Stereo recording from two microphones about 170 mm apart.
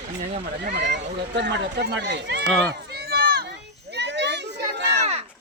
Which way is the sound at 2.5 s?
5° left (ahead or behind).